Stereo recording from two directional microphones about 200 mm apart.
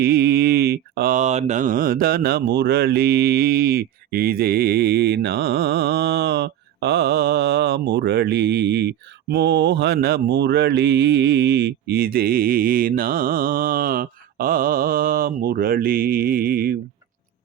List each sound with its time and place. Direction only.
0.0 s mantra: 50° right (ahead or behind)